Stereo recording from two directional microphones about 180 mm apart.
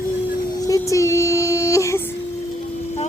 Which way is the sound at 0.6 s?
20° left (ahead or behind).